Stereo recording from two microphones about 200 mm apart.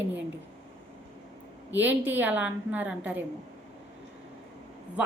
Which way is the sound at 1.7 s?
10° right (ahead or behind).